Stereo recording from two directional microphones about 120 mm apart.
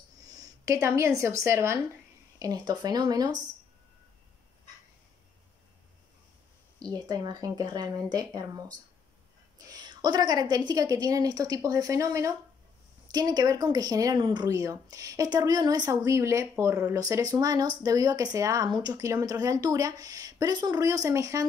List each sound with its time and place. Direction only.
0.3 s speech: 25° right (ahead or behind)
7.1 s speech: 30° right (ahead or behind)